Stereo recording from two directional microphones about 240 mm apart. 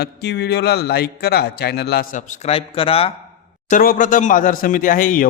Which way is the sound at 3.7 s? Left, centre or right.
Left.